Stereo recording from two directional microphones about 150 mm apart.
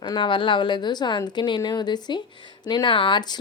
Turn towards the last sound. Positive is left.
turn(degrees=30)  # may be behind; listen again after turning